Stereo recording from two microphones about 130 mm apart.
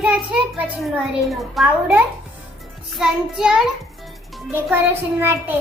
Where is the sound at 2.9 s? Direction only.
5° right (ahead or behind).